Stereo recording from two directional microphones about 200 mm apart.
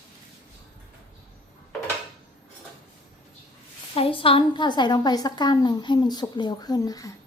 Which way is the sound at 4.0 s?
25° left (ahead or behind).